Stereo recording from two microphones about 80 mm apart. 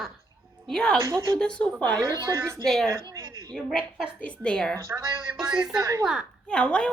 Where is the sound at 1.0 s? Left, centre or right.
Right.